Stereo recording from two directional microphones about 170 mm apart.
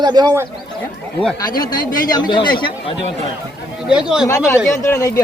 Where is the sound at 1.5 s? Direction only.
25° left (ahead or behind).